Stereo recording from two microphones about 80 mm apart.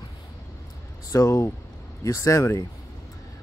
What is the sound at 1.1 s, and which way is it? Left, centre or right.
Speech, left.